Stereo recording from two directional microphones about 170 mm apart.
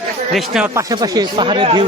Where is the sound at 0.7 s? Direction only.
20° right (ahead or behind).